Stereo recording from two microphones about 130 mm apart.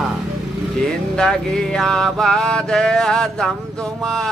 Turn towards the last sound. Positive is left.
turn(degrees=5)  # may be behind; listen again after turning